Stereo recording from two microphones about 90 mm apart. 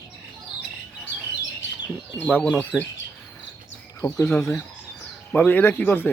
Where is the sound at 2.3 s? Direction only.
20° left (ahead or behind).